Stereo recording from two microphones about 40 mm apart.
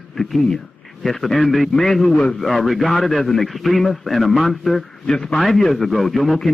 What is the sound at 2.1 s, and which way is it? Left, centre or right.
Speech, left.